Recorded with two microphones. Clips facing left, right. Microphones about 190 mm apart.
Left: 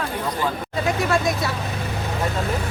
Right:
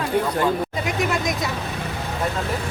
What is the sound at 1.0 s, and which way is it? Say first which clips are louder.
Speech: even; 20° right (ahead or behind).